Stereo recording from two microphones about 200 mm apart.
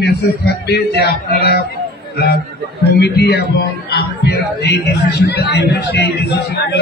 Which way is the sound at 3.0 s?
55° left (ahead or behind).